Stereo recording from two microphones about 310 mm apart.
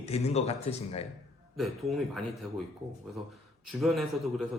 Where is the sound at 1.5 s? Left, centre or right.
Centre.